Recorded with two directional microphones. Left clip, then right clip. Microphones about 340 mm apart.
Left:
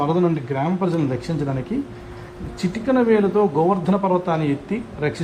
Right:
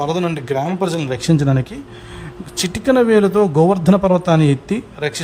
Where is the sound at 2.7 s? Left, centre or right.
Right.